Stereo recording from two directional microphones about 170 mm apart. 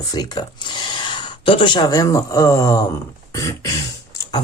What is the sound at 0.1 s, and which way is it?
Speech, 25° left (ahead or behind).